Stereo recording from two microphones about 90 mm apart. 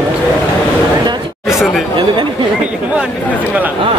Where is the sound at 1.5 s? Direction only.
5° right (ahead or behind).